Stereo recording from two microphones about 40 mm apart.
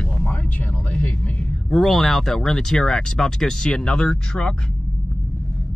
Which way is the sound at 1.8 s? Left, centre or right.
Centre.